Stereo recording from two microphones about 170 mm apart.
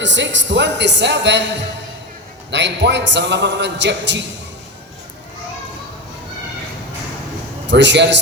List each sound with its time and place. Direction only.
0.0 s a man's voice: 90° right
7.7 s a man's voice: 90° right